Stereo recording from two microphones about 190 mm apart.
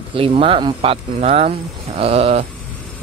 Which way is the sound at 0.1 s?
30° right (ahead or behind).